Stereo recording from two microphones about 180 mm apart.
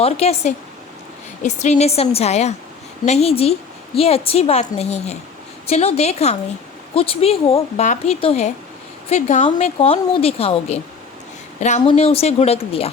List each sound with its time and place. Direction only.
0.0 s a woman's voice: 35° left (ahead or behind)
11.9 s a woman's voice: 35° left (ahead or behind)